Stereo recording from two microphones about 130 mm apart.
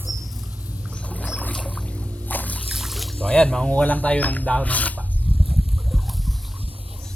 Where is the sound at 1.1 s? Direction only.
10° left (ahead or behind).